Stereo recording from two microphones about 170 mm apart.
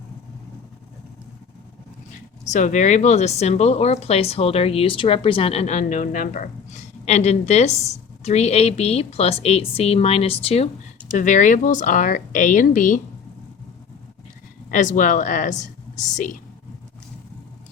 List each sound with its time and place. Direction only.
2.5 s speech: 45° left (ahead or behind)
11.2 s speech: 50° left (ahead or behind)
14.7 s a woman's voice: 50° left (ahead or behind)